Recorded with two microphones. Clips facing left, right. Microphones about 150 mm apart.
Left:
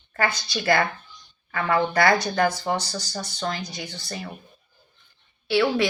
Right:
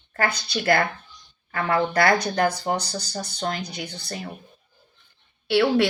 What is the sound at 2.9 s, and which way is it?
Speech, 35° right (ahead or behind).